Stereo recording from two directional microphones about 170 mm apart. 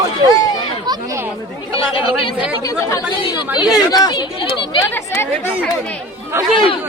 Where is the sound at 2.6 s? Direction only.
20° left (ahead or behind).